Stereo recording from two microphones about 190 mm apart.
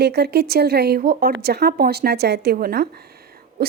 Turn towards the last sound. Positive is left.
turn(degrees=-55)  # may be behind; listen again after turning